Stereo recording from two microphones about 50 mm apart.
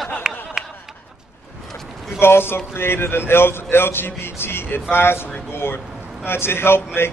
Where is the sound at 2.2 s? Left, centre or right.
Left.